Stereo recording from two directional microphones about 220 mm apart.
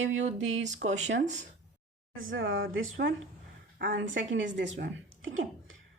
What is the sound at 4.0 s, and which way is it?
A woman's voice, 60° right (ahead or behind).